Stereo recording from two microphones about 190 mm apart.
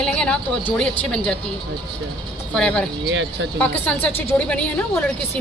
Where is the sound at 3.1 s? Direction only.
75° right (ahead or behind).